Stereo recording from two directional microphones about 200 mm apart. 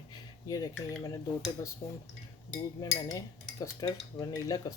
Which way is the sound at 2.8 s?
15° left (ahead or behind).